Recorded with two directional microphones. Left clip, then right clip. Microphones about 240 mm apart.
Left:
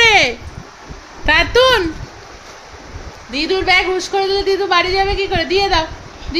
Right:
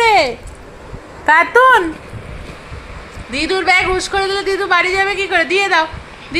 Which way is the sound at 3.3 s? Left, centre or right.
Centre.